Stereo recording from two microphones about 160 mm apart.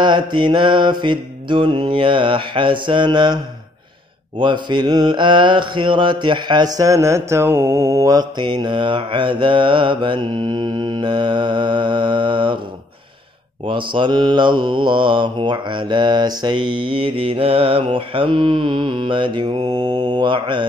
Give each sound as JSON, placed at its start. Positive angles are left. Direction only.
{"t": 0.0, "sound": "mantra", "side_deg": -30}
{"t": 4.4, "sound": "mantra", "side_deg": -30}
{"t": 13.7, "sound": "mantra", "side_deg": -30}